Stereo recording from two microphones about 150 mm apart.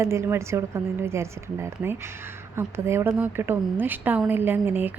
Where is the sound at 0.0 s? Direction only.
20° right (ahead or behind).